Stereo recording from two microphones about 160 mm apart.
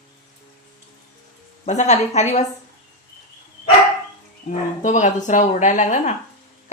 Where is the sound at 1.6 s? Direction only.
45° left (ahead or behind).